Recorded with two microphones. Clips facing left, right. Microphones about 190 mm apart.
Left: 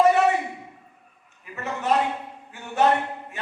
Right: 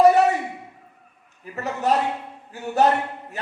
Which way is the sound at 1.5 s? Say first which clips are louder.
Right 1 dB; 40° right (ahead or behind).